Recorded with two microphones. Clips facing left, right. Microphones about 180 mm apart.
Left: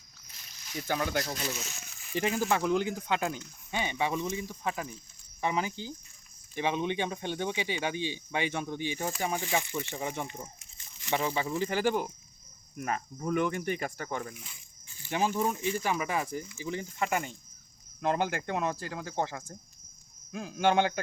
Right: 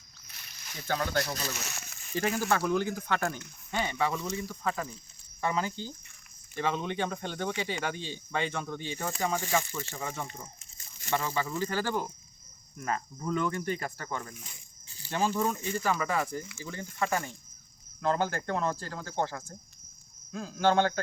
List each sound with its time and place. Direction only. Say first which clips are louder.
0.3 s a sound: right 2 dB; 70° right (ahead or behind)
0.9 s speech: even; 15° left (ahead or behind)
1.2 s speech: even; 70° right (ahead or behind)
2.1 s speech: even; 15° left (ahead or behind)